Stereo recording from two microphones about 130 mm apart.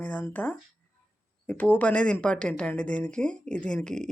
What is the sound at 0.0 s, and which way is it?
Speech, 15° left (ahead or behind).